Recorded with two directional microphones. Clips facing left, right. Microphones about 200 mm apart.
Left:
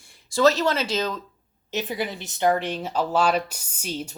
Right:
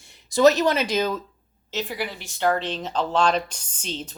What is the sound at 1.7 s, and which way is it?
Speech, 20° left (ahead or behind).